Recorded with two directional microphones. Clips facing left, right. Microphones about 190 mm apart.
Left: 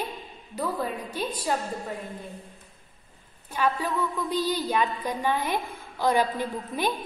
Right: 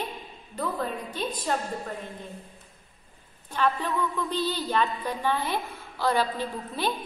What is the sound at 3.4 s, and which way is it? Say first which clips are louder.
A woman's voice: even; 10° left (ahead or behind).